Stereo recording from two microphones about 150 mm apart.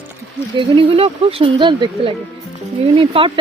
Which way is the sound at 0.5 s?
35° right (ahead or behind).